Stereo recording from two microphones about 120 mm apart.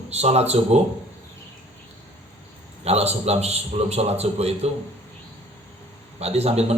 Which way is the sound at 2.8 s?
60° right (ahead or behind).